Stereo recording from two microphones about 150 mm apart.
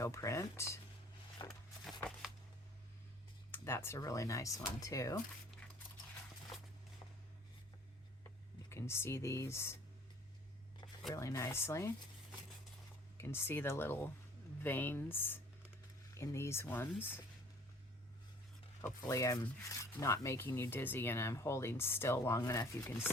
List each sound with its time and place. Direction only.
0.0 s speech: 20° left (ahead or behind)
1.5 s a sound: centre (ahead or behind)
3.5 s speech: 15° left (ahead or behind)
8.7 s speech: 15° left (ahead or behind)
11.1 s speech: 20° left (ahead or behind)
13.1 s speech: 15° left (ahead or behind)
19.0 s speech: 25° left (ahead or behind)